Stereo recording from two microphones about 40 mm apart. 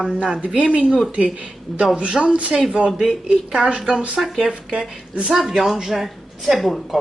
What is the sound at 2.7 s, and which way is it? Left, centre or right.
Speech, right.